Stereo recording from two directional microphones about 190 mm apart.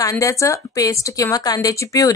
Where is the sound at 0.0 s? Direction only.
15° left (ahead or behind).